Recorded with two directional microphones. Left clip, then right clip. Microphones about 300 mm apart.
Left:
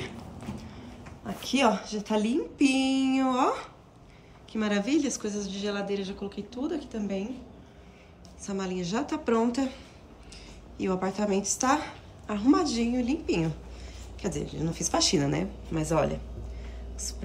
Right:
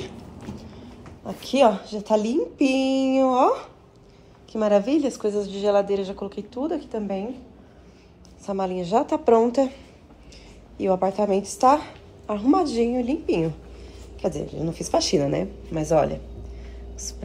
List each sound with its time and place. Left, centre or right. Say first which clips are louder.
0.0 s a woman's voice: right 2 dB; centre
8.6 s a woman's voice: right 10 dB; centre
10.8 s a woman's voice: right 8 dB; centre